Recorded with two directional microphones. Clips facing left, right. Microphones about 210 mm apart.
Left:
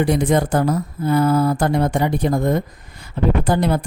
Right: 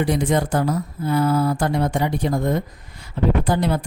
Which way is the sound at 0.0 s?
50° left (ahead or behind).